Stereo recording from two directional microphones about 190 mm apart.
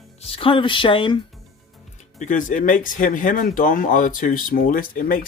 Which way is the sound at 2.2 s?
45° left (ahead or behind).